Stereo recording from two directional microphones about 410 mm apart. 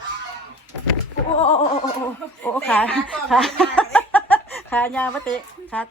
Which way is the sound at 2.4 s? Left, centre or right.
Centre.